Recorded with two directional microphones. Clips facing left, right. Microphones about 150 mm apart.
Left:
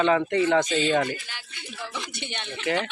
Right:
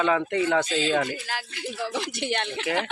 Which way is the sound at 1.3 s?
90° right.